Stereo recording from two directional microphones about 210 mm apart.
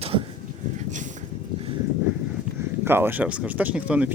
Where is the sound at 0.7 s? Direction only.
35° right (ahead or behind).